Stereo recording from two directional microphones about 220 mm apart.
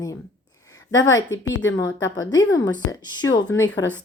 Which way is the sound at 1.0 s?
60° left (ahead or behind).